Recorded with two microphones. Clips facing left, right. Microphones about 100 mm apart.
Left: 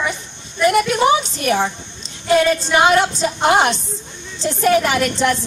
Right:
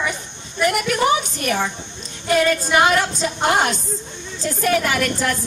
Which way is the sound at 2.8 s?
20° left (ahead or behind).